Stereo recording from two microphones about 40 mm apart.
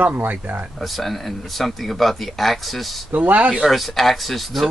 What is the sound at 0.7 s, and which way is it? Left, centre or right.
Speech, centre.